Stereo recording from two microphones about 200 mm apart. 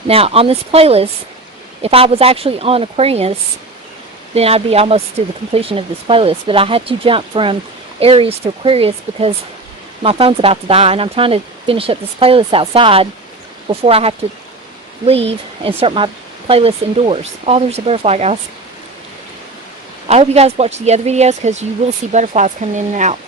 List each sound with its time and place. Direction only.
0.1 s speech: 30° right (ahead or behind)
4.4 s speech: 30° right (ahead or behind)
20.1 s speech: 30° right (ahead or behind)